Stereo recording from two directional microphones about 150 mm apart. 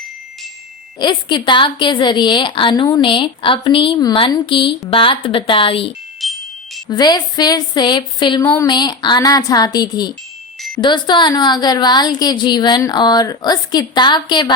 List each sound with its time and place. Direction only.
0.9 s a woman's voice: 30° left (ahead or behind)
6.2 s music: centre (ahead or behind)
6.8 s a woman's voice: 25° left (ahead or behind)
8.4 s speech: 15° left (ahead or behind)
8.6 s a woman's voice: 30° left (ahead or behind)